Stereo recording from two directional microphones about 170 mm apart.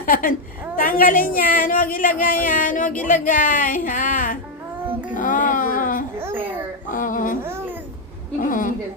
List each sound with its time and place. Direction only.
0.0 s a woman's voice: 55° left (ahead or behind)
4.9 s child singing: 10° right (ahead or behind)
5.1 s speech: 50° left (ahead or behind)
6.1 s a child's voice: 10° right (ahead or behind)
6.8 s a woman's voice: 50° left (ahead or behind)
8.4 s a woman's voice: 50° left (ahead or behind)